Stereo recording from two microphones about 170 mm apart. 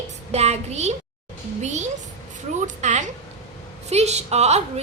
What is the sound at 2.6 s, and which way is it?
A woman's voice, 45° right (ahead or behind).